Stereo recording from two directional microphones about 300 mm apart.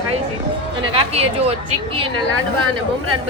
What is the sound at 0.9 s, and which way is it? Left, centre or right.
Speech, centre.